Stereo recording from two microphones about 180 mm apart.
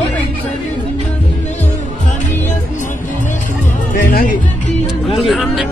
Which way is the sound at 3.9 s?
50° left (ahead or behind).